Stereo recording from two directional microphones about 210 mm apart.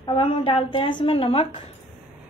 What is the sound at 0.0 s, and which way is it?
A woman's voice, 25° left (ahead or behind).